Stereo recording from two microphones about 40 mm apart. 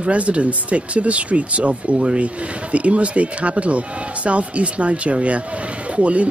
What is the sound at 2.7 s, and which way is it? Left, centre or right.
Speech, right.